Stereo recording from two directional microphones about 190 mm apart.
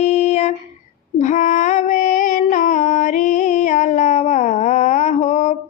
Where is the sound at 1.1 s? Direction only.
40° left (ahead or behind).